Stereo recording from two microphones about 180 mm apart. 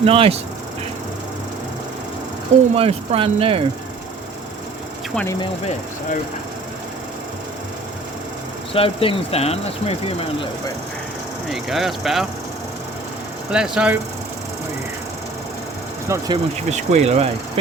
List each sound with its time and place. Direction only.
0.0 s speech: 30° right (ahead or behind)
2.7 s speech: 35° right (ahead or behind)
5.1 s speech: 10° left (ahead or behind)
8.7 s speech: 30° left (ahead or behind)
11.5 s speech: centre (ahead or behind)
13.5 s speech: 5° right (ahead or behind)
16.0 s speech: 20° right (ahead or behind)
16.6 s speech: 40° right (ahead or behind)